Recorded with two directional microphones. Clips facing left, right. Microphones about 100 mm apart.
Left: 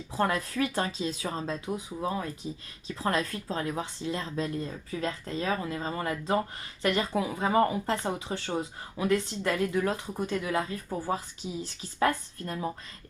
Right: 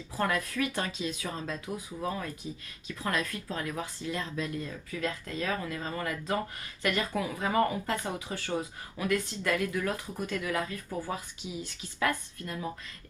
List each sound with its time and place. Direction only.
0.2 s a woman's voice: 30° left (ahead or behind)